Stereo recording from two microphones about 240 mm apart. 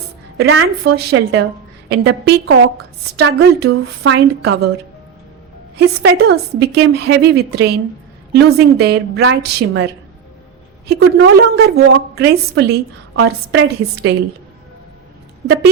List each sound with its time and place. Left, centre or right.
0.3 s a woman's voice: right
5.7 s a woman's voice: right